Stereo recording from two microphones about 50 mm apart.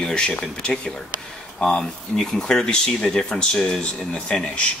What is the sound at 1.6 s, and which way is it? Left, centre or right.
Speech, centre.